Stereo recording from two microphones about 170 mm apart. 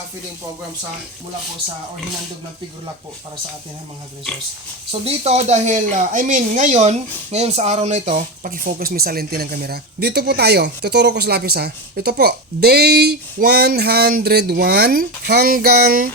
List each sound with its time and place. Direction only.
4.9 s speech: 35° right (ahead or behind); by 16.1 s 60° right (ahead or behind)